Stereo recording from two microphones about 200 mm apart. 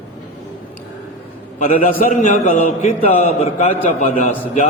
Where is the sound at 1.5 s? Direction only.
45° left (ahead or behind).